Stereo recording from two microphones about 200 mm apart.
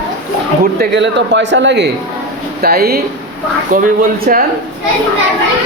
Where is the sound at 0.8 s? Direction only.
60° right (ahead or behind).